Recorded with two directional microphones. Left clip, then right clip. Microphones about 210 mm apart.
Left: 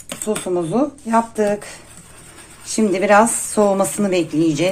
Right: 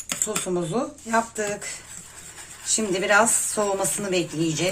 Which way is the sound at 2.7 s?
30° left (ahead or behind).